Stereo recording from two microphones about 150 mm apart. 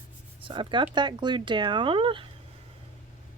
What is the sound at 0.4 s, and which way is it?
Speech, 35° right (ahead or behind).